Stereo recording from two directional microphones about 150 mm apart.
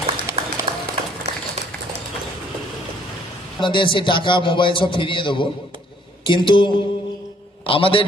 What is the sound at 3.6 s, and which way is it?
A man's voice, 35° left (ahead or behind).